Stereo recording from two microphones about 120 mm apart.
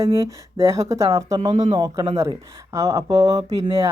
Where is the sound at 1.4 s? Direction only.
80° right.